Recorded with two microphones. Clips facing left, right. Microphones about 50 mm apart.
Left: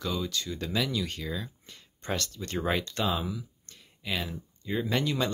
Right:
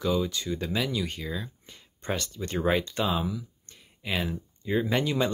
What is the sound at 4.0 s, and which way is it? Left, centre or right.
Speech, centre.